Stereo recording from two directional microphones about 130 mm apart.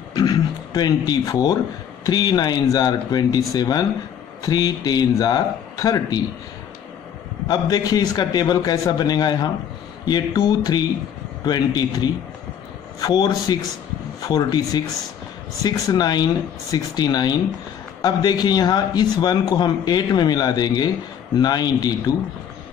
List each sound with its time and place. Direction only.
0.1 s a sound: 30° left (ahead or behind)
2.0 s a man's voice: 30° left (ahead or behind)
7.4 s a man's voice: 30° left (ahead or behind)